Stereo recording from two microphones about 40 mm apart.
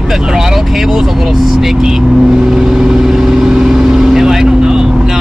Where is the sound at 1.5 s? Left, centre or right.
Centre.